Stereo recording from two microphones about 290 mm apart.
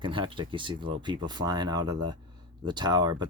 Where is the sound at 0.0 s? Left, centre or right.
Centre.